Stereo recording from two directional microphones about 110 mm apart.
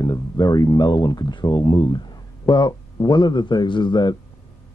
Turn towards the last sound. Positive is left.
turn(degrees=40)  # may be behind; listen again after turning